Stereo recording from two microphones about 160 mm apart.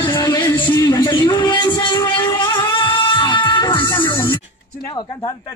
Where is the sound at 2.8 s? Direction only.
30° left (ahead or behind).